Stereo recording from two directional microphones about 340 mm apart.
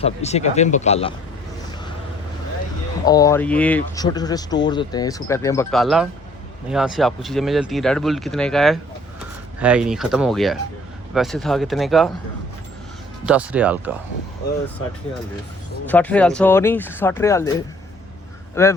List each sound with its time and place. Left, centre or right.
0.0 s speech: centre
3.1 s speech: centre
13.2 s speech: centre
15.9 s speech: centre
18.6 s speech: centre